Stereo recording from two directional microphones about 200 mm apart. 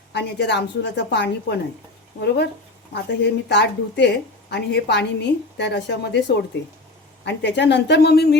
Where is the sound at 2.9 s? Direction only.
60° left (ahead or behind).